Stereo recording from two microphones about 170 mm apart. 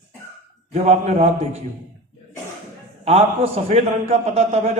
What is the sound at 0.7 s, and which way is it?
Speech, 40° right (ahead or behind).